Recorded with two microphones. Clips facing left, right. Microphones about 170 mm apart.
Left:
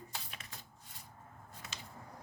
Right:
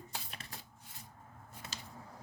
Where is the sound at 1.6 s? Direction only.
30° right (ahead or behind).